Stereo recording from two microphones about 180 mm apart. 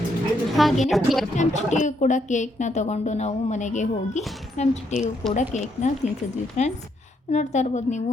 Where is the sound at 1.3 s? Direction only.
40° left (ahead or behind).